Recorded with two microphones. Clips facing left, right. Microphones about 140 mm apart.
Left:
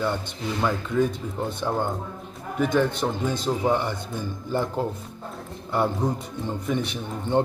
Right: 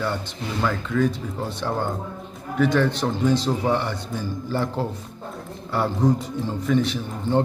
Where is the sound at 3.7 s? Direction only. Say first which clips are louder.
Right 1 dB; 15° left (ahead or behind).